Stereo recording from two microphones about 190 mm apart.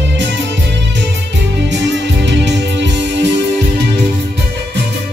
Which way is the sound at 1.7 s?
70° right (ahead or behind).